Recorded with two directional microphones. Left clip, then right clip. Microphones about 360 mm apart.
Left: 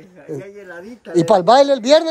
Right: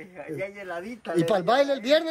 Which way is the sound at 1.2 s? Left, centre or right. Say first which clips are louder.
Left 11 dB; centre.